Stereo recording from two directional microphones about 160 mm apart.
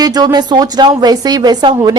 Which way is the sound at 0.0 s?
25° right (ahead or behind).